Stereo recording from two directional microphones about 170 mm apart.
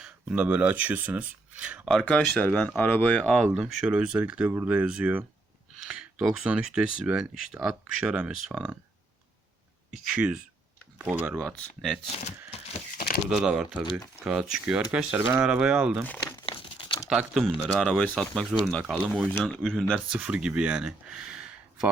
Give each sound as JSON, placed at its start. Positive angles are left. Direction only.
{"t": 0.0, "sound": "speech", "side_deg": -5}
{"t": 9.9, "sound": "speech", "side_deg": -5}
{"t": 11.4, "sound": "speech", "side_deg": 0}
{"t": 12.1, "sound": "a sound", "side_deg": 40}
{"t": 13.3, "sound": "speech", "side_deg": -5}
{"t": 16.0, "sound": "speech", "side_deg": 10}
{"t": 16.5, "sound": "crumpling", "side_deg": 30}
{"t": 17.1, "sound": "speech", "side_deg": 0}
{"t": 20.1, "sound": "speech", "side_deg": -5}